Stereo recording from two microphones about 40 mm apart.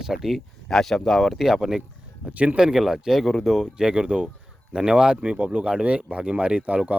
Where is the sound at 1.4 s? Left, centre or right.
Centre.